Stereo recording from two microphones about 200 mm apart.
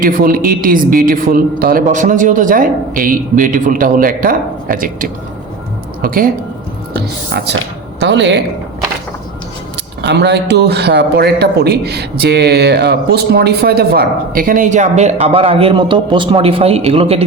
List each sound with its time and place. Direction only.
0.0 s a man's voice: 45° right (ahead or behind); by 8.4 s 65° right (ahead or behind)
10.0 s a man's voice: 55° right (ahead or behind); by 17.2 s 30° right (ahead or behind)